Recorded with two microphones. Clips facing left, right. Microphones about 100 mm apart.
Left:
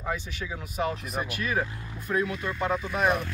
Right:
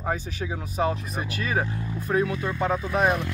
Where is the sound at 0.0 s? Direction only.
35° right (ahead or behind).